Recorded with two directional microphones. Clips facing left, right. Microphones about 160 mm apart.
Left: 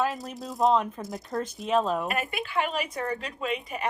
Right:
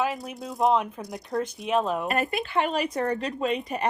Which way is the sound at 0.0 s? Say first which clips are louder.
Right 1 dB; centre (ahead or behind).